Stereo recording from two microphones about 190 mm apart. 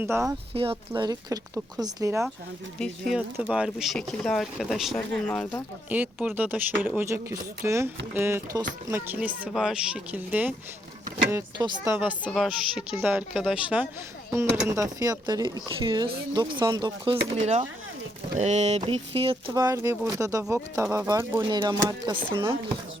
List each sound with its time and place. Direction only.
0.0 s speech: 15° right (ahead or behind)
0.5 s speech: 30° right (ahead or behind)
2.7 s speech: 5° left (ahead or behind)
5.9 s speech: 10° right (ahead or behind)
11.9 s speech: 10° right (ahead or behind)
14.3 s speech: 15° right (ahead or behind)
17.3 s speech: 35° right (ahead or behind)